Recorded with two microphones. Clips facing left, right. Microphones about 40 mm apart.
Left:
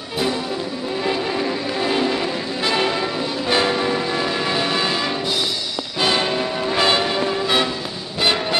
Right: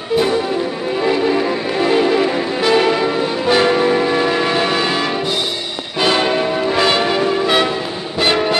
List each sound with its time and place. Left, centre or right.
1.0 s music: centre
3.4 s train: right
5.9 s change ringing: right
7.0 s music: centre